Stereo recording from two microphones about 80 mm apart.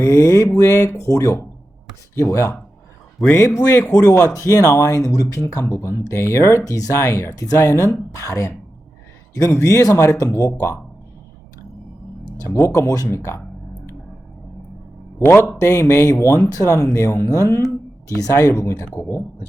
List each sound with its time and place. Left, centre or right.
0.0 s mantra: left
0.5 s speech: left
9.6 s speech: left
12.5 s speech: left
13.1 s speech: left
15.6 s speech: left